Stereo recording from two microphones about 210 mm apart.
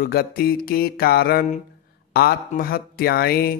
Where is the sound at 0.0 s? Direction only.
45° left (ahead or behind).